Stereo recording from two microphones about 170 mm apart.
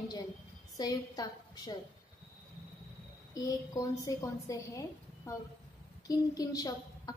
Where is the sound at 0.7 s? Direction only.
25° left (ahead or behind).